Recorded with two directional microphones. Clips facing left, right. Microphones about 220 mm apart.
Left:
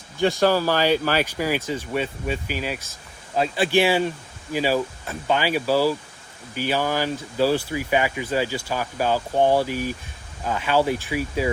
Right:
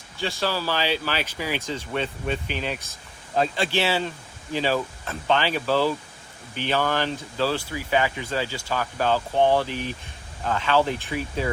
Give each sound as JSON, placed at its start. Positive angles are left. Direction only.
{"t": 0.4, "sound": "speech", "side_deg": 45}
{"t": 1.6, "sound": "speech", "side_deg": 10}